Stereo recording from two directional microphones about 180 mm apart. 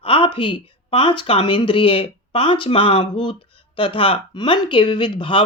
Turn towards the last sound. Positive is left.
turn(degrees=25)  # may be behind; listen again after turning